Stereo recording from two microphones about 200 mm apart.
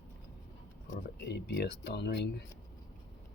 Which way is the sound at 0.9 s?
50° left (ahead or behind).